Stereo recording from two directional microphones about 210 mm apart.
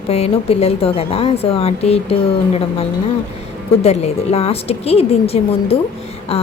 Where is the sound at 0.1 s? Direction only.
30° left (ahead or behind).